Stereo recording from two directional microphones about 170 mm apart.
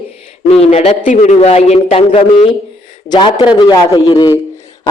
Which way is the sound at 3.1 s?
25° left (ahead or behind).